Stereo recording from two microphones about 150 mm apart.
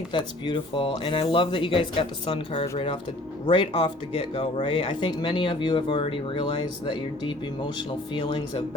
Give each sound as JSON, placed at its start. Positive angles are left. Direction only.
{"t": 0.1, "sound": "speech", "side_deg": 35}